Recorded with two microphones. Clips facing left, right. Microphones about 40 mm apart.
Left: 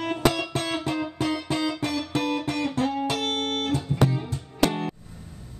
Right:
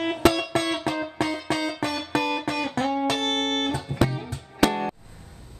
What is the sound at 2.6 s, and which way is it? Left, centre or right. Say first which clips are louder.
Music: right 2 dB; right.